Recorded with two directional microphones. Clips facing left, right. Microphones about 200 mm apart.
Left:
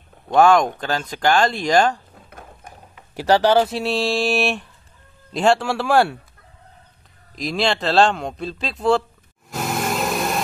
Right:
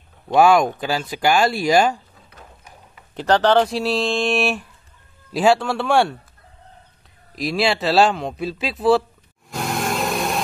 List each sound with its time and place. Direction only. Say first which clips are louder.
0.3 s speech: even; 10° right (ahead or behind)
2.2 s sewing machine: left 4 dB; 50° left (ahead or behind)
3.2 s a man's voice: even; 10° left (ahead or behind)
7.3 s a man's voice: right 1 dB; 5° right (ahead or behind)
9.5 s vehicle: even; centre (ahead or behind)